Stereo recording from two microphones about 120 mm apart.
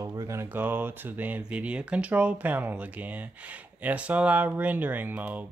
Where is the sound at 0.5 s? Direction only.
15° right (ahead or behind).